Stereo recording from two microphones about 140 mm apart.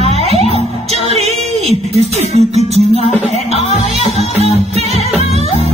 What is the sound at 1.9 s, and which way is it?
Music, 50° right (ahead or behind).